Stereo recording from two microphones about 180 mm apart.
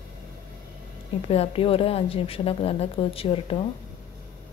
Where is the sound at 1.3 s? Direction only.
30° left (ahead or behind).